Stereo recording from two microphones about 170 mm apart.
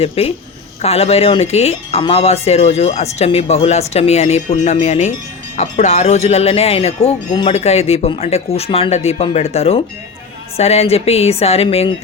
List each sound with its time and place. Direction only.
0.0 s speech: 35° left (ahead or behind)